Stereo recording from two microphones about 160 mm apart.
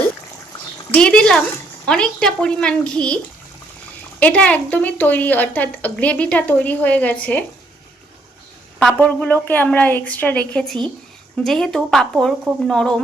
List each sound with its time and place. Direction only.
0.9 s a woman's voice: 5° left (ahead or behind)
4.2 s a woman's voice: 10° left (ahead or behind)
8.8 s a woman's voice: 5° left (ahead or behind)